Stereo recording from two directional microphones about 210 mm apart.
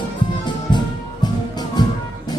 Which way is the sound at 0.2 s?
20° left (ahead or behind).